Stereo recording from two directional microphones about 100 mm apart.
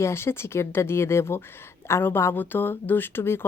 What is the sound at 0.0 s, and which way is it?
Speech, 25° left (ahead or behind).